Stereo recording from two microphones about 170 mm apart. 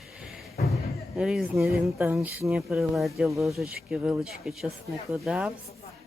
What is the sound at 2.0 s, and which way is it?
Speech, 15° right (ahead or behind).